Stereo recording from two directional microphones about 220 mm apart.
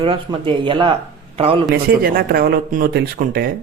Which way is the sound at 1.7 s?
40° right (ahead or behind).